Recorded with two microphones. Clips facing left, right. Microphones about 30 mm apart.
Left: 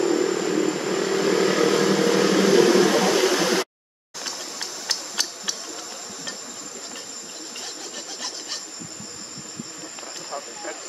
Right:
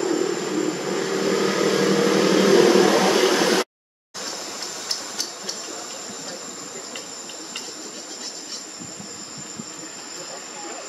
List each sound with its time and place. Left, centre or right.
0.0 s vehicle: centre; by 3.6 s right
4.8 s hammer: left